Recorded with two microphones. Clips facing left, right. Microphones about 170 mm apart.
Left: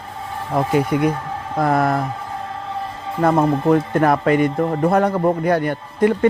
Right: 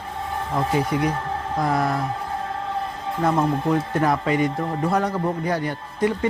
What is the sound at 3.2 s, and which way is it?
Speech, 55° left (ahead or behind).